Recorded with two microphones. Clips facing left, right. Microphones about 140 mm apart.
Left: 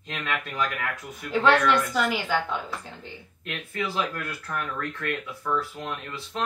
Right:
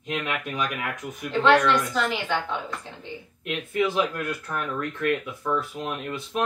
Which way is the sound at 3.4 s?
20° right (ahead or behind).